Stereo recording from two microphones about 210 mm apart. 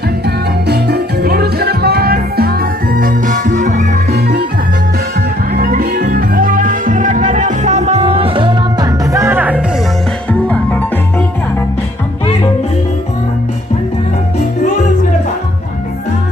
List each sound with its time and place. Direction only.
0.7 s music: 50° right (ahead or behind)
4.1 s music: 50° right (ahead or behind)
5.5 s music: 45° right (ahead or behind); by 9.6 s 10° right (ahead or behind)
10.4 s music: 5° left (ahead or behind)